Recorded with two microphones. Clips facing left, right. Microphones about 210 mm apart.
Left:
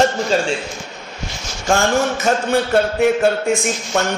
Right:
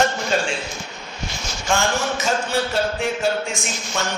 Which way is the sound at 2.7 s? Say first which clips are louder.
Left 8 dB; 60° left (ahead or behind).